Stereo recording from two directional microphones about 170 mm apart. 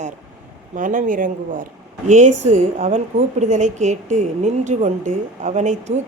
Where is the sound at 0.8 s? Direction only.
50° right (ahead or behind).